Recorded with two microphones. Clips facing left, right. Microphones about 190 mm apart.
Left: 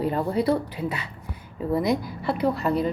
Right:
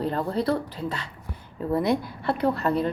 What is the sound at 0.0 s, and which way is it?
Speech, 10° left (ahead or behind).